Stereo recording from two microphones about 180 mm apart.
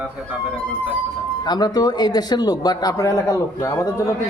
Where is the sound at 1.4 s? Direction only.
25° left (ahead or behind).